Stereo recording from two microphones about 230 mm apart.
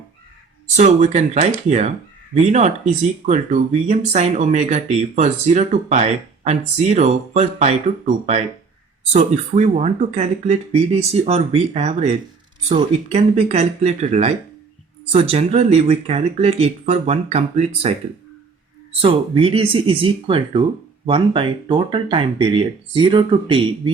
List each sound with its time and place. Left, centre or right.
0.8 s speech: right
19.0 s speech: right